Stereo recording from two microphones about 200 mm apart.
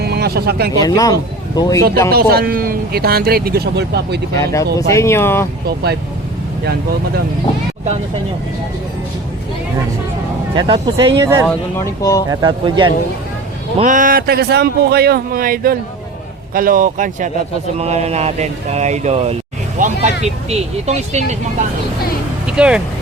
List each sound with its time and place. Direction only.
0.0 s a sound: 55° right (ahead or behind)
0.8 s speech: 20° left (ahead or behind)
2.0 s a man's voice: 50° right (ahead or behind)
4.9 s speech: 15° left (ahead or behind)
5.6 s a man's voice: 55° right (ahead or behind)
10.5 s speech: 25° right (ahead or behind)
11.2 s speech: 15° right (ahead or behind)
11.4 s speech: 15° left (ahead or behind)
12.3 s speech: 20° right (ahead or behind)
13.7 s a man's voice: 40° right (ahead or behind)
22.4 s speech: 5° right (ahead or behind)